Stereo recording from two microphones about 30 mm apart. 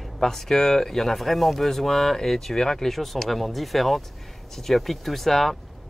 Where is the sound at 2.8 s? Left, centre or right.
Centre.